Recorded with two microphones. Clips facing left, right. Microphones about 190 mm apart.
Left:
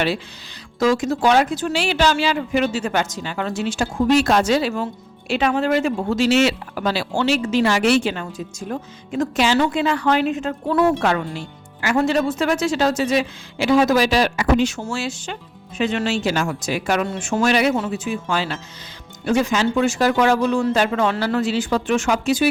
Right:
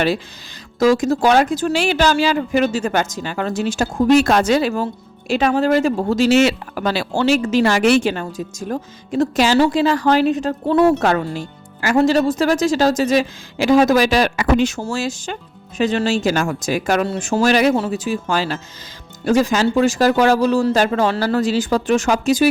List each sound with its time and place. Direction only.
0.8 s speech: 40° right (ahead or behind)
5.3 s speech: 40° right (ahead or behind); by 14.7 s 60° right (ahead or behind)
14.7 s speech: 35° right (ahead or behind)